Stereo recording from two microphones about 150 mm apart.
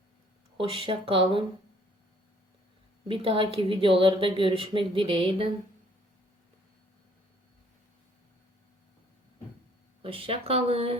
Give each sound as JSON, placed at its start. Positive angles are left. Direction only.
{"t": 0.5, "sound": "a woman's voice", "side_deg": -35}
{"t": 3.1, "sound": "a woman's voice", "side_deg": -35}
{"t": 10.0, "sound": "a woman's voice", "side_deg": -40}